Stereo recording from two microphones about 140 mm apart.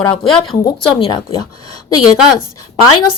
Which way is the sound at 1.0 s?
40° left (ahead or behind).